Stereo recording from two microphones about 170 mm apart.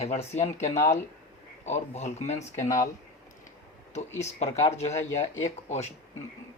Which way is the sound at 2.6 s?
20° left (ahead or behind).